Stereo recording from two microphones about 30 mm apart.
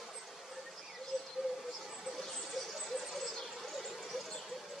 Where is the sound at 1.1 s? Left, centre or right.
Left.